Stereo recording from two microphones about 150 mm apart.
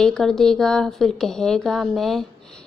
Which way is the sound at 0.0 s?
5° left (ahead or behind).